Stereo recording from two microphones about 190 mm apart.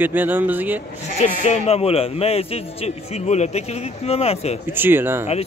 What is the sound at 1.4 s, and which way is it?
A man's voice, 35° left (ahead or behind).